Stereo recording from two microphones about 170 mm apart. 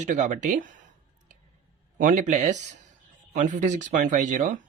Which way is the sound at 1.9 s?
50° right (ahead or behind).